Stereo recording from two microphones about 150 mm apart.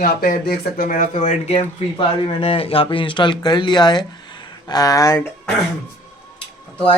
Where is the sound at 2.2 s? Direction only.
35° left (ahead or behind); by 5.3 s 20° left (ahead or behind).